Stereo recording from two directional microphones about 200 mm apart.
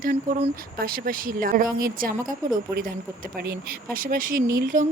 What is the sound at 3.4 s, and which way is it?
Speech, 50° right (ahead or behind).